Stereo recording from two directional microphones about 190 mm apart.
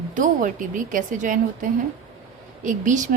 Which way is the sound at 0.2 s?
45° right (ahead or behind).